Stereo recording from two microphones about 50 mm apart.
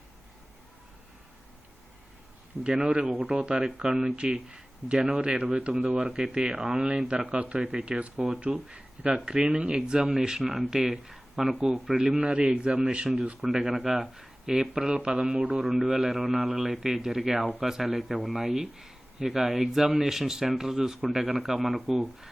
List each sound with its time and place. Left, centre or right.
2.6 s speech: centre
6.5 s speech: centre
6.8 s speech: right
8.1 s speech: centre
13.4 s speech: centre
15.6 s a man's voice: centre
16.3 s speech: centre
16.6 s speech: centre